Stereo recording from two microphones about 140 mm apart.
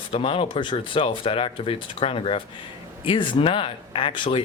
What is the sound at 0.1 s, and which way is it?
Speech, 45° left (ahead or behind).